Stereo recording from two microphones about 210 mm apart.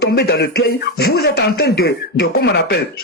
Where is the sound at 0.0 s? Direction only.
50° left (ahead or behind).